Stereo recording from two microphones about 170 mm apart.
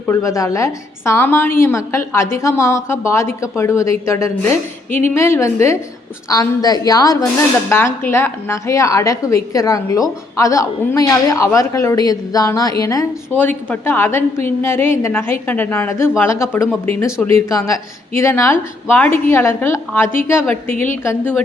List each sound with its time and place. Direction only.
0.1 s a woman's voice: 20° left (ahead or behind)